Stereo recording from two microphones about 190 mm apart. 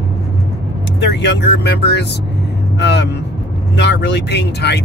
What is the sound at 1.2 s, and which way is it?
Speech, 65° left (ahead or behind).